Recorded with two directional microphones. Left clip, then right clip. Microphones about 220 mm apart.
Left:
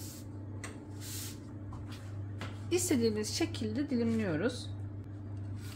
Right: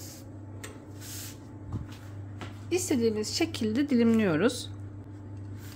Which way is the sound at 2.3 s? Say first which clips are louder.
Right 3 dB; 10° right (ahead or behind).